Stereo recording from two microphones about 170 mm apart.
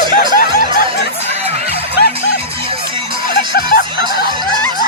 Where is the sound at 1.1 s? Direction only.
40° right (ahead or behind).